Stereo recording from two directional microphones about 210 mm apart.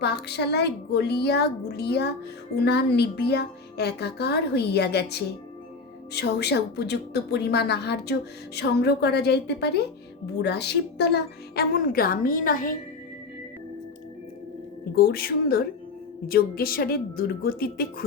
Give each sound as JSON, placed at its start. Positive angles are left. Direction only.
{"t": 0.0, "sound": "speech", "side_deg": 50}
{"t": 14.9, "sound": "speech", "side_deg": 45}